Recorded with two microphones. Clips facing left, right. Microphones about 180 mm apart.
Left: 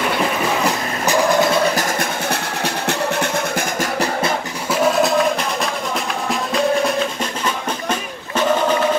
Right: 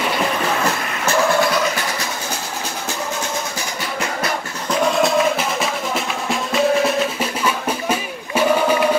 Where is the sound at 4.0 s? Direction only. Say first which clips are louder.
Left 2 dB; 25° left (ahead or behind).